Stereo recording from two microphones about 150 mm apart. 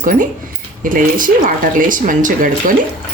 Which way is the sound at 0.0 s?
65° right (ahead or behind).